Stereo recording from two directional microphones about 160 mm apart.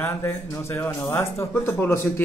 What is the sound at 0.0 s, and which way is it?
Speech, 15° left (ahead or behind).